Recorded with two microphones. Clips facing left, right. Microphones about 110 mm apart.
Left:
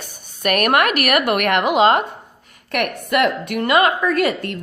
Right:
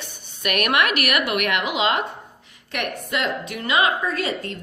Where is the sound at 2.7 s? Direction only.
60° left (ahead or behind).